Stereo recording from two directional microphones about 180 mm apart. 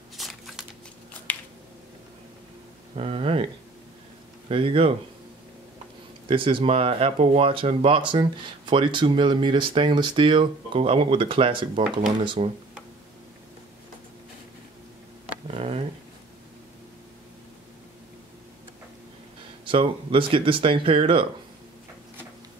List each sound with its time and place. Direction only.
0.2 s a sound: centre (ahead or behind)
3.0 s speech: 30° right (ahead or behind)
4.5 s speech: 30° right (ahead or behind)
6.2 s speech: 30° right (ahead or behind)
15.4 s a sound: 35° right (ahead or behind)
19.6 s speech: 30° right (ahead or behind)